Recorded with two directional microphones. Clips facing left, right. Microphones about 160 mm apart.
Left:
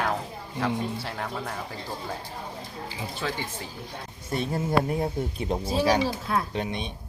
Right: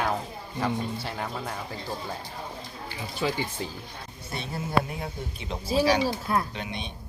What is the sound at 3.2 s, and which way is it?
Speech, 15° right (ahead or behind).